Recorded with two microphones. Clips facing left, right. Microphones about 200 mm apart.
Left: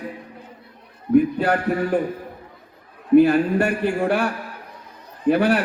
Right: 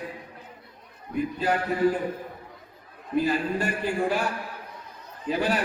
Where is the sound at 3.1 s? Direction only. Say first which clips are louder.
Left 11 dB; 65° left (ahead or behind).